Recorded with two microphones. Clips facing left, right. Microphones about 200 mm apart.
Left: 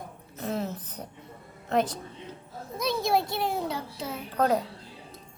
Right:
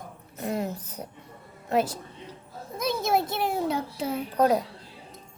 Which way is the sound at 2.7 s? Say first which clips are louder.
Right 1 dB; 50° right (ahead or behind).